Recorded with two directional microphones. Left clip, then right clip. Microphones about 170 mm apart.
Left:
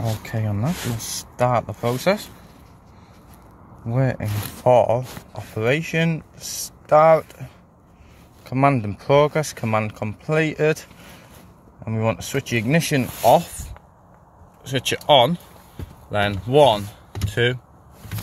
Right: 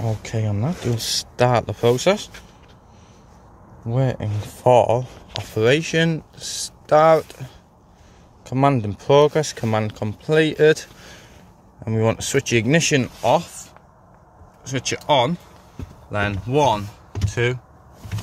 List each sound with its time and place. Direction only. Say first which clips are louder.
0.2 s speech: right 1 dB; 15° right (ahead or behind)
0.9 s speech: right 5 dB; 35° right (ahead or behind)
3.9 s speech: even; 5° right (ahead or behind)
4.6 s speech: right 1 dB; 20° right (ahead or behind)
8.5 s speech: even; 15° right (ahead or behind)
14.6 s speech: left 2 dB; 10° left (ahead or behind)